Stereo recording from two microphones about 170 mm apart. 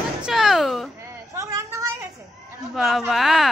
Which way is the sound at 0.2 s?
Centre (ahead or behind).